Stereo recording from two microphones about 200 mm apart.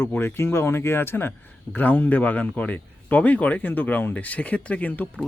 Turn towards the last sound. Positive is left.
turn(degrees=10)  # may be behind; listen again after turning